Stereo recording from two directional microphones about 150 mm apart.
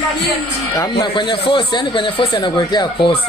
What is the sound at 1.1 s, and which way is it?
Speech, 35° left (ahead or behind).